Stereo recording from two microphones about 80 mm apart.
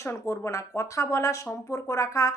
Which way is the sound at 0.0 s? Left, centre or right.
Left.